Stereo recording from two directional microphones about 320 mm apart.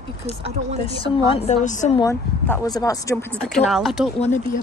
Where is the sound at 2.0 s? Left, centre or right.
Centre.